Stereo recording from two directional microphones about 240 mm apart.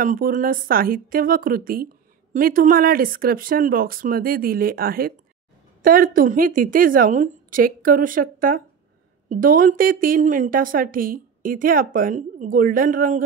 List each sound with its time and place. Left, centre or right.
0.0 s a woman's voice: right